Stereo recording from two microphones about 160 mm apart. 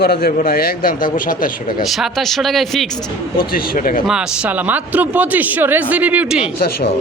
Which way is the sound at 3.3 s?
65° left (ahead or behind).